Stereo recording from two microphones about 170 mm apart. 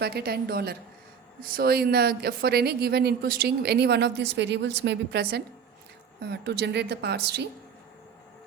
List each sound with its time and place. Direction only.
0.0 s speech: 70° right (ahead or behind)